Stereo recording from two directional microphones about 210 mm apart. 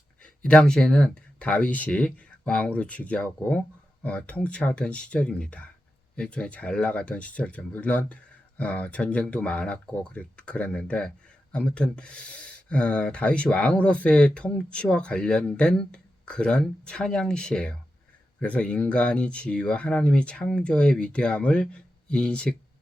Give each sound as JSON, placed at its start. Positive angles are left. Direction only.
{"t": 0.4, "sound": "speech", "side_deg": 5}